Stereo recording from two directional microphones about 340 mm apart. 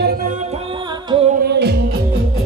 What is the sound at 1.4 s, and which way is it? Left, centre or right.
Music, right.